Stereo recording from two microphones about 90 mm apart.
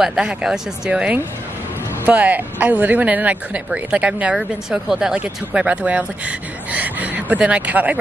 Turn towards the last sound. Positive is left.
turn(degrees=-15)  # may be behind; listen again after turning